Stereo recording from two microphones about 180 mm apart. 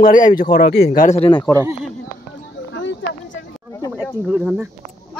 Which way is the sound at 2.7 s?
90° left.